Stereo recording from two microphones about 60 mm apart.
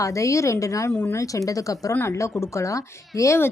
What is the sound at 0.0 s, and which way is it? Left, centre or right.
A woman's voice, left.